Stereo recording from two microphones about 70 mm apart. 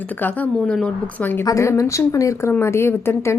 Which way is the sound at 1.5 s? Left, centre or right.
Left.